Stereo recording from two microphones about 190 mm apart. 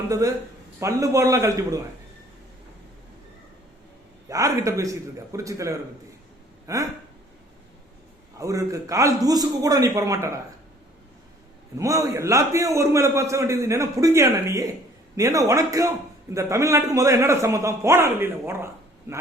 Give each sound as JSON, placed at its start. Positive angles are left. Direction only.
{"t": 0.1, "sound": "a man's voice", "side_deg": -15}
{"t": 4.3, "sound": "a man's voice", "side_deg": -15}
{"t": 8.4, "sound": "a man's voice", "side_deg": -15}
{"t": 11.8, "sound": "a man's voice", "side_deg": -15}